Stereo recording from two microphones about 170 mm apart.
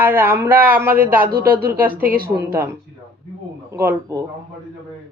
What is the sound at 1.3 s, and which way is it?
Speech, 65° right (ahead or behind).